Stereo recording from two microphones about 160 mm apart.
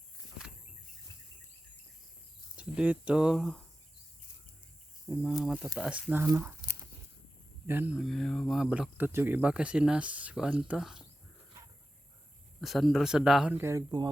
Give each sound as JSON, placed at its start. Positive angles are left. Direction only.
{"t": 2.6, "sound": "speech", "side_deg": -10}
{"t": 5.0, "sound": "speech", "side_deg": -5}
{"t": 7.7, "sound": "speech", "side_deg": -10}
{"t": 12.6, "sound": "speech", "side_deg": 0}
{"t": 13.6, "sound": "speech", "side_deg": -20}